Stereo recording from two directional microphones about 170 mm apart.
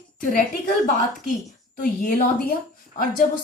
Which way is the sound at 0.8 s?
50° left (ahead or behind).